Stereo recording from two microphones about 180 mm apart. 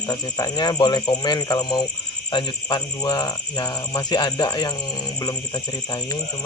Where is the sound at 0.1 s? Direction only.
20° left (ahead or behind).